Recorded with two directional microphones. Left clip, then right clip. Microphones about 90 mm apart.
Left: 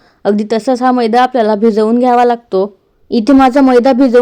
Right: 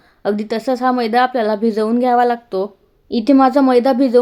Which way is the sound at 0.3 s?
35° left (ahead or behind).